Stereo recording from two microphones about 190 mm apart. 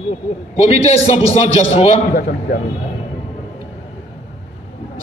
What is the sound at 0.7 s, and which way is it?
A man's voice, 35° left (ahead or behind).